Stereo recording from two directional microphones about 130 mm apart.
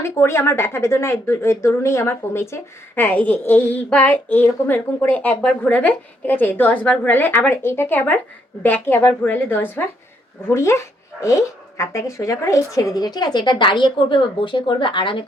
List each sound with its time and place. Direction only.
0.0 s speech: 20° left (ahead or behind); by 15.2 s 40° left (ahead or behind)